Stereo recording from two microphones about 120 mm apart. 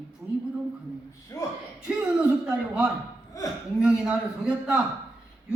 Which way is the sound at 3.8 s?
5° right (ahead or behind).